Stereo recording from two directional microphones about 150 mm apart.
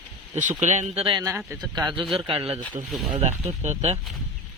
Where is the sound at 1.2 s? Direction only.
20° right (ahead or behind); by 4.0 s 45° right (ahead or behind).